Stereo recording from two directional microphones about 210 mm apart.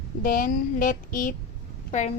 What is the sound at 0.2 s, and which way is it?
A woman's voice, 40° left (ahead or behind).